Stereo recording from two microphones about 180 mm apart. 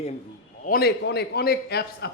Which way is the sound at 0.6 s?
55° left (ahead or behind).